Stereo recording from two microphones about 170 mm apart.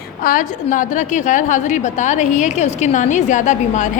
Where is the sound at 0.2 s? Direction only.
50° left (ahead or behind).